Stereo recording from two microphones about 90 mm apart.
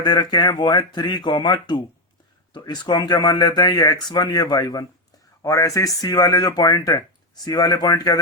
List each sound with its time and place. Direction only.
0.0 s speech: 50° left (ahead or behind)